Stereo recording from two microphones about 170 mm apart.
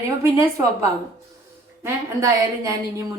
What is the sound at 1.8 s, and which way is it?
Speech, 15° right (ahead or behind).